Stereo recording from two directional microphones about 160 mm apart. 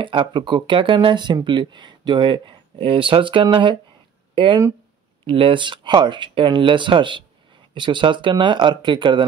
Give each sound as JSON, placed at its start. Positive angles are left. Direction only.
{"t": 0.0, "sound": "speech", "side_deg": -30}